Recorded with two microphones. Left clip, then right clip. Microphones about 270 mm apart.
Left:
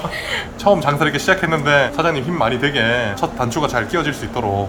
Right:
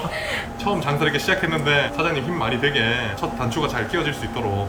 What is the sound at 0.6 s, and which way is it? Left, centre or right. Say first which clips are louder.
Speech: left 8 dB; left.